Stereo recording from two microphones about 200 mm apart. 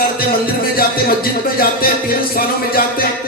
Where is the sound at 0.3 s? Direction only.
50° left (ahead or behind).